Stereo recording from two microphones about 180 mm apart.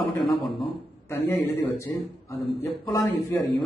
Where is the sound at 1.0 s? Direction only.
10° left (ahead or behind).